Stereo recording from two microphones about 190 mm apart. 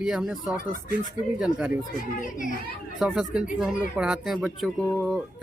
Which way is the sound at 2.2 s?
45° left (ahead or behind).